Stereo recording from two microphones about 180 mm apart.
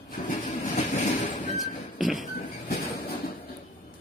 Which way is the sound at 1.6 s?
Centre (ahead or behind).